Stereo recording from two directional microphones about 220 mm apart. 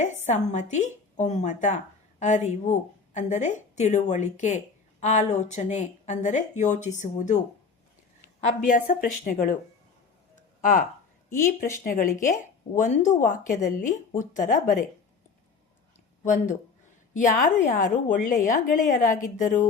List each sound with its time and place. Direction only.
0.0 s a woman's voice: 30° left (ahead or behind)
8.4 s a woman's voice: 35° left (ahead or behind)
10.6 s a woman's voice: 40° left (ahead or behind)
16.2 s a woman's voice: 35° left (ahead or behind)